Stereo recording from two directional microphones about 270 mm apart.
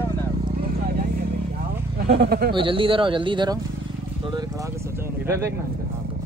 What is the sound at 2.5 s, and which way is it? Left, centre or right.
A man's voice, centre.